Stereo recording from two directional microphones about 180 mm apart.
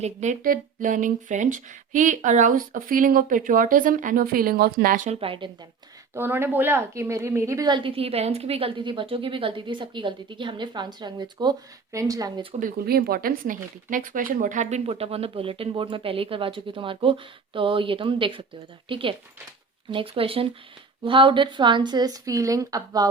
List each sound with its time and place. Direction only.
0.0 s speech: 40° right (ahead or behind)
5.2 s a woman's voice: 30° right (ahead or behind)
6.1 s a woman's voice: 10° right (ahead or behind)
12.5 s a woman's voice: 55° right (ahead or behind); by 23.0 s 20° right (ahead or behind)